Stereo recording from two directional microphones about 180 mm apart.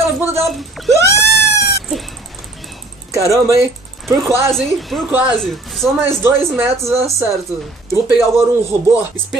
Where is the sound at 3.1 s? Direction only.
15° right (ahead or behind).